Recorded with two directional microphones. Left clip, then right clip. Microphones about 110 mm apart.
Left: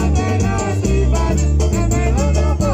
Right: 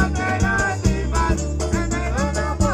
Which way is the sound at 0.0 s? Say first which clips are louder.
Left 1 dB; 20° left (ahead or behind).